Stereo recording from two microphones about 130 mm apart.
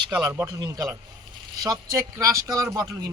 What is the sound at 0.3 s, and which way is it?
Speech, 30° right (ahead or behind).